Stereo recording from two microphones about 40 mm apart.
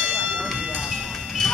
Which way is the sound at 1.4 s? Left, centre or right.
Centre.